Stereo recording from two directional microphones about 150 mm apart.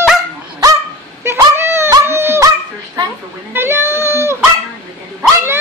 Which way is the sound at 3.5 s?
15° right (ahead or behind).